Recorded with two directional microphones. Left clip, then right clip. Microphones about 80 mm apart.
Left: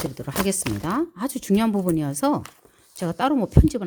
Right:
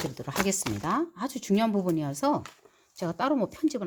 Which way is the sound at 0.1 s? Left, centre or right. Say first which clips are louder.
Left 3 dB; left.